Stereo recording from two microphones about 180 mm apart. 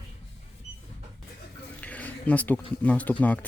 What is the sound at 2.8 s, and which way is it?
Speech, 10° left (ahead or behind).